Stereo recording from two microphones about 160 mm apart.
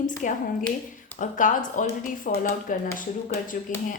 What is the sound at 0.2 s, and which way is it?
Speech, 55° left (ahead or behind).